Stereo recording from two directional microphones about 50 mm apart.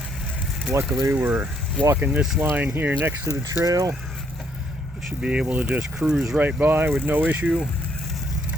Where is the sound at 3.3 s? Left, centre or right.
Right.